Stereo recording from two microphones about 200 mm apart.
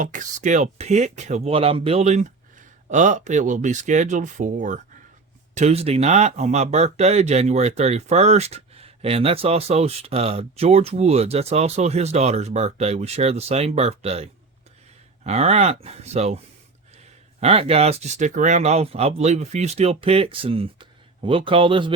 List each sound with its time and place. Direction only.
0.0 s speech: 40° right (ahead or behind)
17.4 s speech: 30° right (ahead or behind)